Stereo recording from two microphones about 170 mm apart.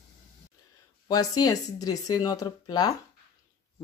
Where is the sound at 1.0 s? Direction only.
20° left (ahead or behind).